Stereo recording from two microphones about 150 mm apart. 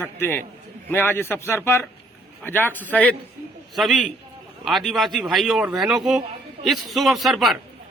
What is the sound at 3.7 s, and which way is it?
A man's voice, centre (ahead or behind).